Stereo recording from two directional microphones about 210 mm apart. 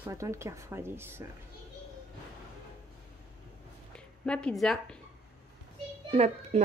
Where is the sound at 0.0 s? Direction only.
15° right (ahead or behind).